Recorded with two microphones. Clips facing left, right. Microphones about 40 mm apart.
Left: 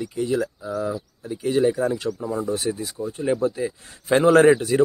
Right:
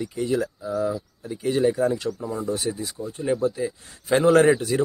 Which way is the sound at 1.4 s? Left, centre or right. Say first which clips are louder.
Left 1 dB; centre.